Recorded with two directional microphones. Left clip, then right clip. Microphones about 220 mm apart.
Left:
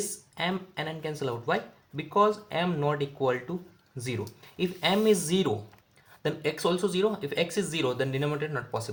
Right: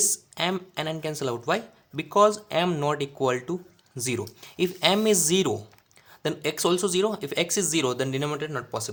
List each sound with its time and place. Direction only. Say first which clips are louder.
0.0 s speech: right 5 dB; 35° right (ahead or behind)